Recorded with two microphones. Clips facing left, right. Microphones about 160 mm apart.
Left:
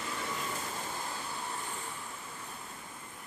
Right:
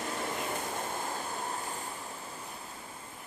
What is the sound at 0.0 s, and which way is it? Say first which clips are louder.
Vehicle: right 3 dB; 50° right (ahead or behind).